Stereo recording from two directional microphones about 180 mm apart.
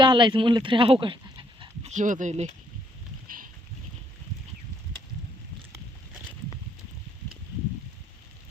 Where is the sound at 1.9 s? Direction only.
45° right (ahead or behind).